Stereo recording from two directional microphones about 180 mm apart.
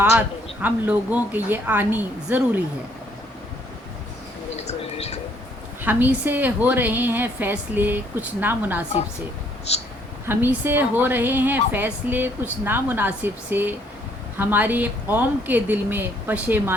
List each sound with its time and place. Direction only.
0.0 s a woman's voice: 10° right (ahead or behind)
4.5 s a sound: 35° left (ahead or behind)
5.8 s a woman's voice: 10° right (ahead or behind)
9.7 s speech: 35° left (ahead or behind)
10.2 s a woman's voice: 10° right (ahead or behind)